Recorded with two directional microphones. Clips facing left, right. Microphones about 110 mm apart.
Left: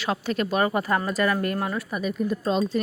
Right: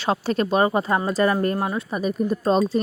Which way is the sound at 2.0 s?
40° right (ahead or behind).